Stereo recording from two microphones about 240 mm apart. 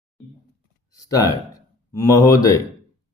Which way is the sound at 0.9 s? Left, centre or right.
Centre.